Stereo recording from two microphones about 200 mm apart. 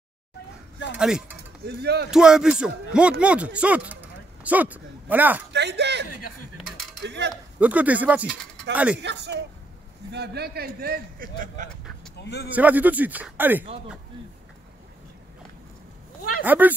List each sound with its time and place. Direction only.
0.9 s speech: 5° right (ahead or behind)
1.7 s a man's voice: 55° right (ahead or behind)
2.0 s speech: 5° right (ahead or behind)
5.5 s a man's voice: 60° right (ahead or behind)
7.6 s a man's voice: 5° right (ahead or behind)
9.0 s a man's voice: 60° right (ahead or behind); by 11.7 s 45° right (ahead or behind)
12.2 s a man's voice: 55° left (ahead or behind)
12.4 s a man's voice: 10° right (ahead or behind)
16.4 s a man's voice: 10° right (ahead or behind)